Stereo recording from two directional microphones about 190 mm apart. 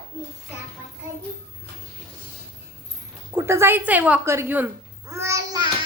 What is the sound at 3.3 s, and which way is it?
A woman's voice, 15° right (ahead or behind).